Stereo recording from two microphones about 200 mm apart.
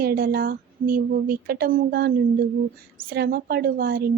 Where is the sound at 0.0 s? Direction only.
50° right (ahead or behind).